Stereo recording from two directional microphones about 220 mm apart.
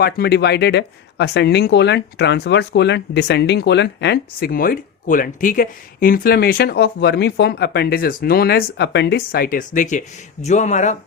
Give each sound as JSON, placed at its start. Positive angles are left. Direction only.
{"t": 0.0, "sound": "speech", "side_deg": 45}